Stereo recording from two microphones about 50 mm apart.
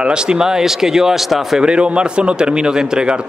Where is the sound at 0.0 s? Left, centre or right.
Centre.